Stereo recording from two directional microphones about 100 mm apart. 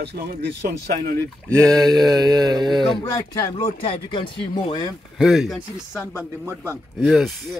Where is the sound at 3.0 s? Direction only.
40° left (ahead or behind).